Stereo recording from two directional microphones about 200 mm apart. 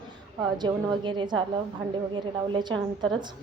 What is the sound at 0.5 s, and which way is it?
A woman's voice, 20° right (ahead or behind).